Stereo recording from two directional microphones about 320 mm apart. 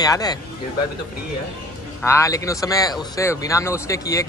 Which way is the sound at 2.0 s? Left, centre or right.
Centre.